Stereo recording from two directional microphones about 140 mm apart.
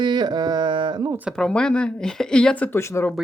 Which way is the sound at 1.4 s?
5° left (ahead or behind).